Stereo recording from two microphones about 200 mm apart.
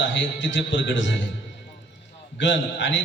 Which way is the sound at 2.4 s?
65° left (ahead or behind).